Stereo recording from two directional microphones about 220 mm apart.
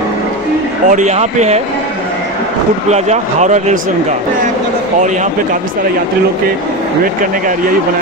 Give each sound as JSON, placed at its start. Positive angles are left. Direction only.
{"t": 0.8, "sound": "speech", "side_deg": -35}
{"t": 2.9, "sound": "speech", "side_deg": -30}